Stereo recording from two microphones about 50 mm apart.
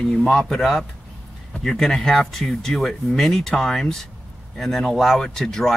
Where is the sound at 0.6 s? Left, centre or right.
Centre.